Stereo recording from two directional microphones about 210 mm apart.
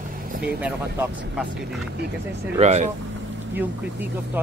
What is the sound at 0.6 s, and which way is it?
Speech, 10° right (ahead or behind).